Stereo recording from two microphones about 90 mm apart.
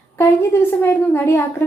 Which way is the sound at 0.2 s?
25° left (ahead or behind).